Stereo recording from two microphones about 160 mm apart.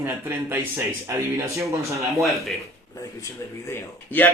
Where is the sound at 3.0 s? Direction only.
15° left (ahead or behind).